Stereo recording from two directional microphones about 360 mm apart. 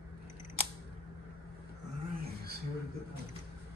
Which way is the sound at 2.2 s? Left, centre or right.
Right.